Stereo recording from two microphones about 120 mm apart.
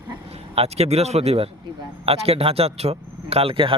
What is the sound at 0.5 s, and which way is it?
A man's voice, 60° right (ahead or behind).